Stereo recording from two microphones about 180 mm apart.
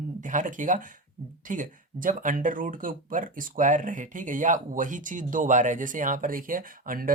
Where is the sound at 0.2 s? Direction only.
45° right (ahead or behind).